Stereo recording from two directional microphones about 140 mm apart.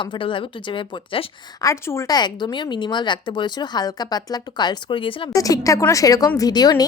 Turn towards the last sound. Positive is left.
turn(degrees=30)  # may be behind; listen again after turning